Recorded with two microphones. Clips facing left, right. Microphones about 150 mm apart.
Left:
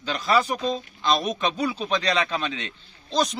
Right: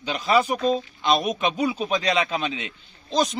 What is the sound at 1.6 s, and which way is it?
Speech, 20° right (ahead or behind).